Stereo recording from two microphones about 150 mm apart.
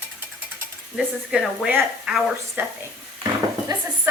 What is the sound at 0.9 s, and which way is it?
A woman's voice, 5° right (ahead or behind).